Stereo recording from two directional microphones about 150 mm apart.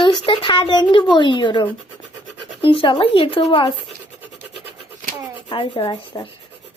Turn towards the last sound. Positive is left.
turn(degrees=30)  # may be behind; listen again after turning